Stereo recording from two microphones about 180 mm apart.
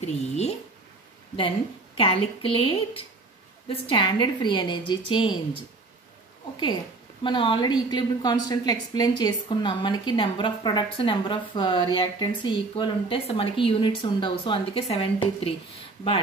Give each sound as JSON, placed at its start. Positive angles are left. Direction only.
{"t": 0.0, "sound": "a woman's voice", "side_deg": 35}
{"t": 2.0, "sound": "a woman's voice", "side_deg": 30}
{"t": 7.2, "sound": "a woman's voice", "side_deg": 25}